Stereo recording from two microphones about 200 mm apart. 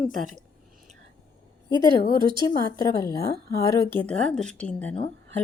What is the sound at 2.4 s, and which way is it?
Speech, 15° left (ahead or behind).